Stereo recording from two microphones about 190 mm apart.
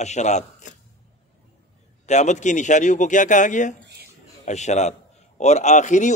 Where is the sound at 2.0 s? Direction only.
40° left (ahead or behind).